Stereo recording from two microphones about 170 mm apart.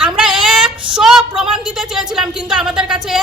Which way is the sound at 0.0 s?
5° right (ahead or behind).